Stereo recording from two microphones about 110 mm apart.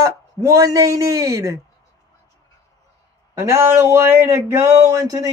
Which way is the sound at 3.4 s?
25° right (ahead or behind).